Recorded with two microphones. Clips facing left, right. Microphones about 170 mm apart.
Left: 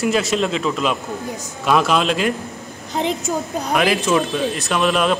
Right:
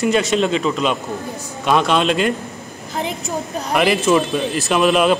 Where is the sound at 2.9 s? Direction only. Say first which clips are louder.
Left 3 dB; 20° left (ahead or behind).